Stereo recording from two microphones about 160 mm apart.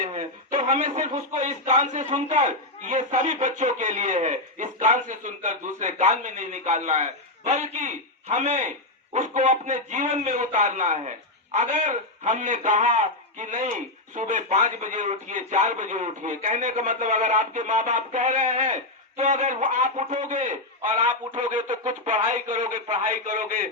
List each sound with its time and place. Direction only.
0.0 s a sound: 55° right (ahead or behind)
0.7 s a man's voice: 55° right (ahead or behind)
20.8 s speech: 30° right (ahead or behind)
21.7 s a man's voice: 50° right (ahead or behind)